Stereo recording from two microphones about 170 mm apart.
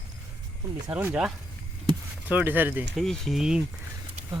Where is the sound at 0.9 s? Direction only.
10° right (ahead or behind).